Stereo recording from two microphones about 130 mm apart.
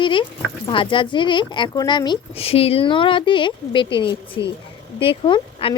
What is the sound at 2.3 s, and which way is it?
Speech, 50° left (ahead or behind).